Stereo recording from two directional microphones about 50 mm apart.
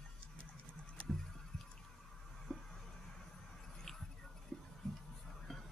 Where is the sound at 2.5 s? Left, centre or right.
Centre.